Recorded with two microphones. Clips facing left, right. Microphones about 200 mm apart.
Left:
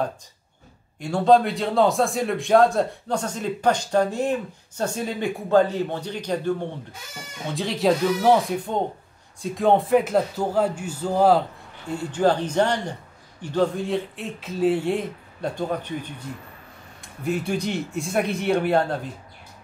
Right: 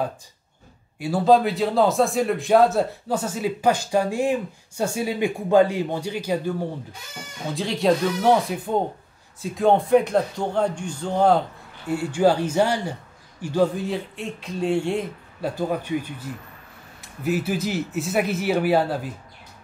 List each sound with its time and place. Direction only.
0.9 s a man's voice: 5° right (ahead or behind)
7.5 s speech: centre (ahead or behind)
11.9 s a man's voice: 10° right (ahead or behind)